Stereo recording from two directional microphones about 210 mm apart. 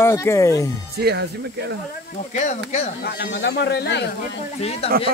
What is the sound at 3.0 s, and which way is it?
Speech, 50° left (ahead or behind).